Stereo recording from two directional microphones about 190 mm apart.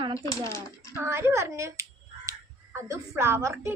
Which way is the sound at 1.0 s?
15° right (ahead or behind).